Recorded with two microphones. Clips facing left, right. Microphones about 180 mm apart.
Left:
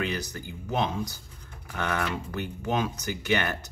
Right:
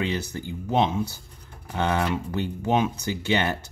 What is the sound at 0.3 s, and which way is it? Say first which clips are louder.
Speech: right 5 dB; 25° right (ahead or behind).